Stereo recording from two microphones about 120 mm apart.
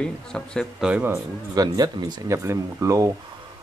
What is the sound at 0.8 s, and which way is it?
Speech, 10° right (ahead or behind).